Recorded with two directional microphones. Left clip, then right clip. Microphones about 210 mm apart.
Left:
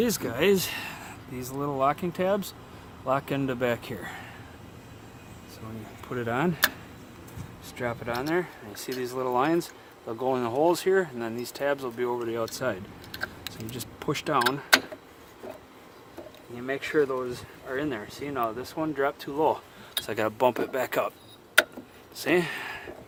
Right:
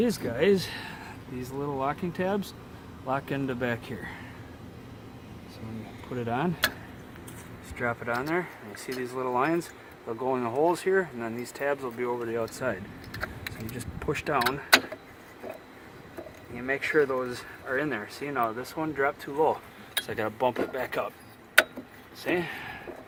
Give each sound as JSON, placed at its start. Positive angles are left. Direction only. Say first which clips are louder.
{"t": 0.0, "sound": "speech", "louder": "even", "side_deg": 50}
{"t": 6.1, "sound": "speech", "louder": "left 2 dB", "side_deg": 45}
{"t": 7.8, "sound": "speech", "louder": "right 1 dB", "side_deg": 50}
{"t": 13.7, "sound": "speech", "louder": "left 1 dB", "side_deg": 40}
{"t": 16.6, "sound": "speech", "louder": "right 1 dB", "side_deg": 30}
{"t": 18.8, "sound": "speech", "louder": "even", "side_deg": 40}
{"t": 20.1, "sound": "speech", "louder": "left 4 dB", "side_deg": 50}
{"t": 22.2, "sound": "speech", "louder": "left 4 dB", "side_deg": 50}